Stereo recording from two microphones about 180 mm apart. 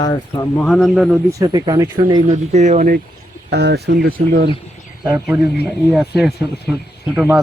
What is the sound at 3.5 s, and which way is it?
Speech, 65° right (ahead or behind).